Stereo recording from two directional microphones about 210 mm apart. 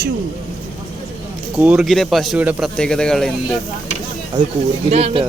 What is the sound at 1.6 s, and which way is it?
Speech, 5° right (ahead or behind).